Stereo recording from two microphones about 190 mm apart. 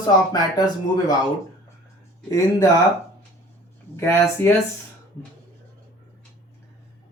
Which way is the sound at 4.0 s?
15° left (ahead or behind).